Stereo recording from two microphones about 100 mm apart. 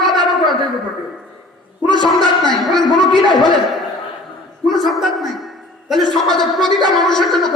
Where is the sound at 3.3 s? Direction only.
50° left (ahead or behind).